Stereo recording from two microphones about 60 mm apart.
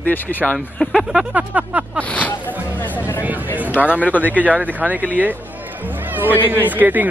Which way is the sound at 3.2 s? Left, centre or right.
Right.